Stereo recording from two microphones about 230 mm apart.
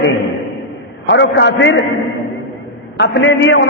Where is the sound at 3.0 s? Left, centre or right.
Left.